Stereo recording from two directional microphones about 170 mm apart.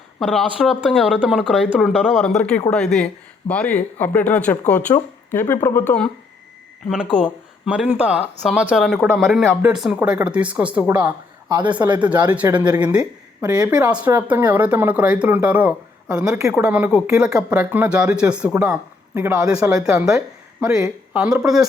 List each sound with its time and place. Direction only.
0.2 s speech: centre (ahead or behind)
4.9 s speech: 20° left (ahead or behind)
6.8 s speech: 5° right (ahead or behind)
9.4 s speech: 10° right (ahead or behind)
9.7 s speech: centre (ahead or behind)
11.4 s speech: 25° right (ahead or behind)
11.8 s speech: 10° right (ahead or behind)
13.4 s speech: 20° right (ahead or behind)
13.9 s speech: 10° right (ahead or behind)
19.5 s speech: 5° right (ahead or behind)